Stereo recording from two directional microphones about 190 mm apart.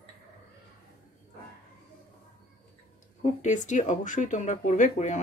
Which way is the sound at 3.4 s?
40° left (ahead or behind).